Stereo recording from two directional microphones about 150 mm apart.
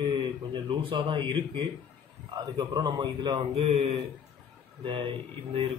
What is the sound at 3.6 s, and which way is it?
A man's voice, 40° right (ahead or behind).